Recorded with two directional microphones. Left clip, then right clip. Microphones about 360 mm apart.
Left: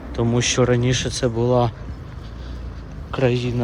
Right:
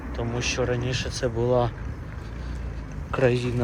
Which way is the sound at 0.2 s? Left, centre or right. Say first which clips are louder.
Left 8 dB; centre.